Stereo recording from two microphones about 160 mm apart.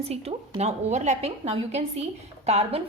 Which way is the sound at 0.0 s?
40° right (ahead or behind).